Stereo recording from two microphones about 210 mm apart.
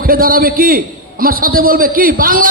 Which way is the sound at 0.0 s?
45° right (ahead or behind).